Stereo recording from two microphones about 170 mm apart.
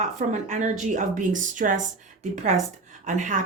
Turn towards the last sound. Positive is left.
turn(degrees=-45)  # may be behind; listen again after turning